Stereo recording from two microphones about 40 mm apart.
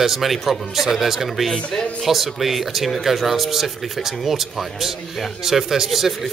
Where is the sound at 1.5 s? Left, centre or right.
Centre.